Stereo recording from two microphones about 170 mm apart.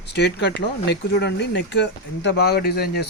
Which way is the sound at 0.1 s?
85° left.